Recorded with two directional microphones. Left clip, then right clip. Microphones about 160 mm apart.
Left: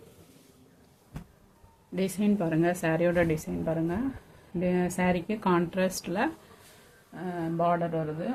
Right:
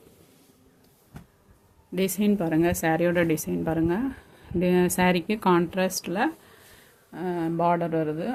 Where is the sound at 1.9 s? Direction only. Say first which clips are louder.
Right 4 dB; 40° right (ahead or behind).